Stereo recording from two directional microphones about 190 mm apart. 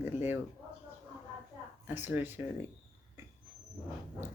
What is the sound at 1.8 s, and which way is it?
Speech, 10° right (ahead or behind).